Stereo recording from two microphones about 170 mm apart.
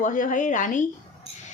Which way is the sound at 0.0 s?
50° left (ahead or behind).